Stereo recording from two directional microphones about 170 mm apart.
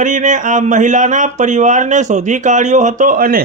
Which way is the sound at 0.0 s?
45° right (ahead or behind).